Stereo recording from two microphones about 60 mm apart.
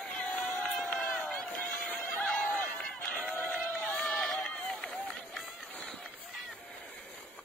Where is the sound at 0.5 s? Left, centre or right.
Left.